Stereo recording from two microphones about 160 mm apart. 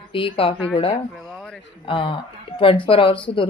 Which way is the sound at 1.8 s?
30° left (ahead or behind).